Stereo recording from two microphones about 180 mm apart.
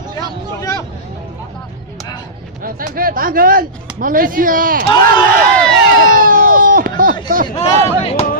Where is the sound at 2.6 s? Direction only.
50° right (ahead or behind).